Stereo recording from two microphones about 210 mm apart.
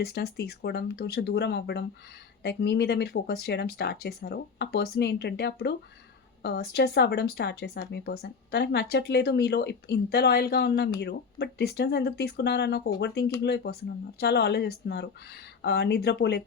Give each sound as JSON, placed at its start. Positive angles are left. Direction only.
{"t": 0.0, "sound": "speech", "side_deg": 50}